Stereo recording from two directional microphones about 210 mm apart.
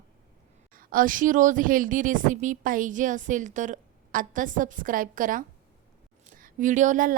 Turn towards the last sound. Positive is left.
turn(degrees=-40)  # may be behind; listen again after turning